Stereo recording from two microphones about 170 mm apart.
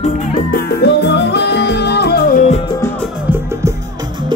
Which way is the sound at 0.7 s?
85° left.